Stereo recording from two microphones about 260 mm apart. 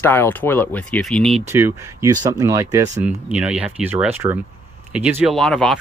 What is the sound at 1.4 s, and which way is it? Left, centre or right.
Speech, centre.